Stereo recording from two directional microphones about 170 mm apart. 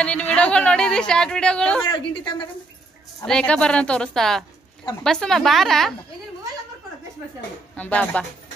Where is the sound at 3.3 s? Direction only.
5° left (ahead or behind).